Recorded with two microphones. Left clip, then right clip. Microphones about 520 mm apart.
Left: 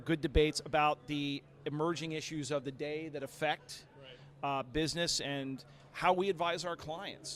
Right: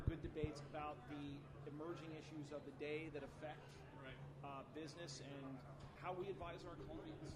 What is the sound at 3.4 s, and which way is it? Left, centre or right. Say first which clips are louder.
A man's voice: left 19 dB; left.